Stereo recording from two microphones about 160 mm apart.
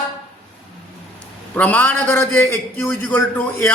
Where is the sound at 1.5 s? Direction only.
10° left (ahead or behind).